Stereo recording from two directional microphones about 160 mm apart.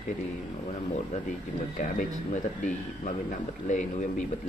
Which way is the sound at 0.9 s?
50° left (ahead or behind).